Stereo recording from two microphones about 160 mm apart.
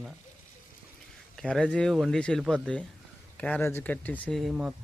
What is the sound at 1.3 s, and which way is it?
Speech, 5° left (ahead or behind).